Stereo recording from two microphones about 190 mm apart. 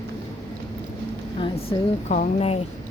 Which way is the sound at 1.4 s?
25° left (ahead or behind).